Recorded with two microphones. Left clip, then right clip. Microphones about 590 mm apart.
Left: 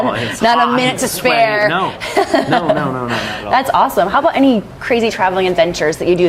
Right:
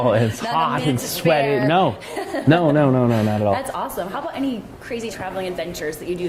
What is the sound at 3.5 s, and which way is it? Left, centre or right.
A woman's voice, left.